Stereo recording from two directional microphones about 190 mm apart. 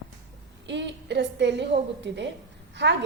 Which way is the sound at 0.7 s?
70° right (ahead or behind).